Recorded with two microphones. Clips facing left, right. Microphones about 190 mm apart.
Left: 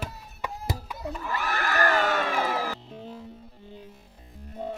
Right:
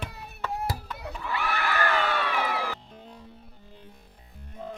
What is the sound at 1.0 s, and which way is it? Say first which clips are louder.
Speech: left 1 dB; 45° left (ahead or behind).